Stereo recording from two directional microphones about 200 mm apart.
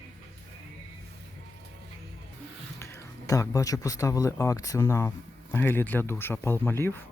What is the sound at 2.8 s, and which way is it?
Speech, 15° left (ahead or behind).